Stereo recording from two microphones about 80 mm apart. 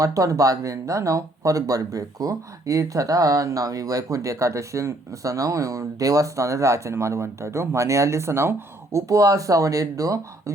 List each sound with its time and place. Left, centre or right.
0.0 s speech: right